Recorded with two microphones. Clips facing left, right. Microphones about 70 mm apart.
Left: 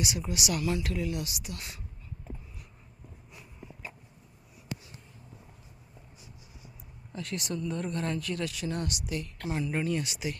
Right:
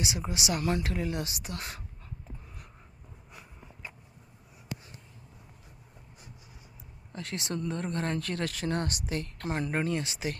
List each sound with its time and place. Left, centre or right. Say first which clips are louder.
0.0 s speech: even; right
0.6 s speech: right 1 dB; right
7.2 s speech: left 1 dB; right
7.5 s speech: right 1 dB; right